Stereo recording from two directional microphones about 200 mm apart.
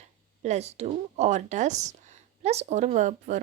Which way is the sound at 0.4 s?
35° right (ahead or behind).